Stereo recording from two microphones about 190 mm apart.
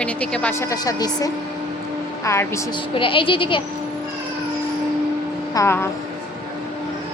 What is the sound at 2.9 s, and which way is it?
Speech, 25° left (ahead or behind).